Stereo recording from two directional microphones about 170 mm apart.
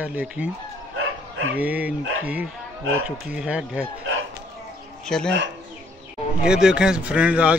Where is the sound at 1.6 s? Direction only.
10° right (ahead or behind).